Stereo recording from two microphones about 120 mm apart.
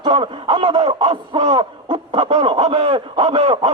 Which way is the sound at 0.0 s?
40° right (ahead or behind).